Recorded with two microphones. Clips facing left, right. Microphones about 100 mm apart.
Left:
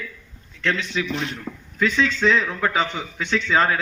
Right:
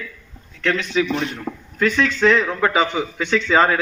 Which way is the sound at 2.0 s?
65° right (ahead or behind).